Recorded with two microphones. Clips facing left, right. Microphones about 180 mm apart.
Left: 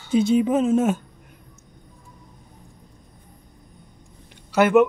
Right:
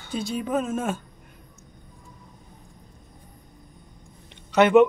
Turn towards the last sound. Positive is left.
turn(degrees=5)  # may be behind; listen again after turning